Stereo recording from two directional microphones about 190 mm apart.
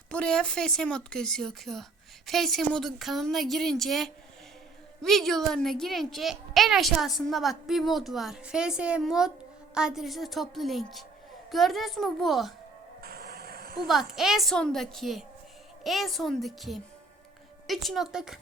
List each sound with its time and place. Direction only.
0.1 s a child's voice: 5° left (ahead or behind)
13.0 s a sound: 55° right (ahead or behind)
13.8 s a child's voice: centre (ahead or behind)